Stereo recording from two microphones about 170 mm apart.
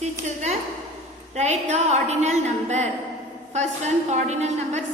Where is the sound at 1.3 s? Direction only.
40° right (ahead or behind).